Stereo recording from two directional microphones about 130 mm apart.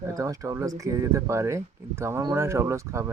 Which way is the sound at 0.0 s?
25° right (ahead or behind).